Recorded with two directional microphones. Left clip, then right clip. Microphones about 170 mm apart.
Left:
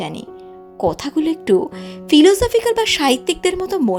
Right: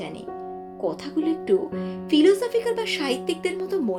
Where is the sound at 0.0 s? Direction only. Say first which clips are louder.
Left 5 dB; 60° left (ahead or behind).